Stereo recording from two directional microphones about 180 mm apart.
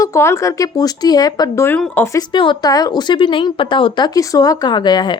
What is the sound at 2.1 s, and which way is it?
Speech, 25° left (ahead or behind).